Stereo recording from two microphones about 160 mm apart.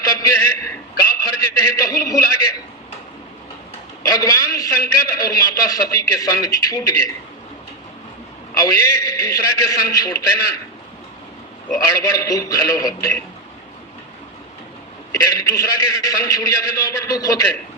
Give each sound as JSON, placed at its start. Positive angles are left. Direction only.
{"t": 0.0, "sound": "a sound", "side_deg": 20}
{"t": 4.0, "sound": "a man's voice", "side_deg": 20}
{"t": 8.5, "sound": "a man's voice", "side_deg": 20}
{"t": 11.7, "sound": "a man's voice", "side_deg": 20}
{"t": 15.1, "sound": "a man's voice", "side_deg": 20}